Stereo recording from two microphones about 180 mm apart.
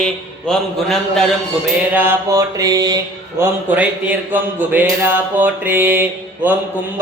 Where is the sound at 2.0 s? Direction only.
15° right (ahead or behind).